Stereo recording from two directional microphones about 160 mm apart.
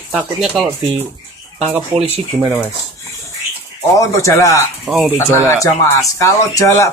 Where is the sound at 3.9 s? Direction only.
20° left (ahead or behind).